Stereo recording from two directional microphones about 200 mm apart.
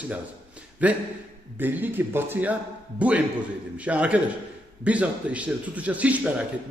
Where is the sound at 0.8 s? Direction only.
5° right (ahead or behind).